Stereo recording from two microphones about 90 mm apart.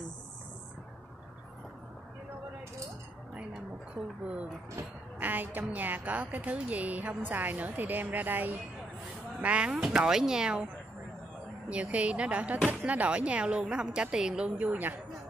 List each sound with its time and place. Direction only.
4.7 s a woman's voice: 20° right (ahead or behind)
9.7 s a woman's voice: 5° right (ahead or behind)
11.7 s a woman's voice: 15° right (ahead or behind)